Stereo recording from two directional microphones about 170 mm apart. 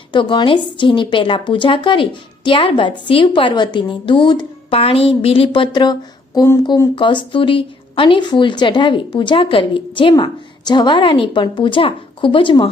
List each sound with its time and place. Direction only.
0.1 s speech: 30° left (ahead or behind)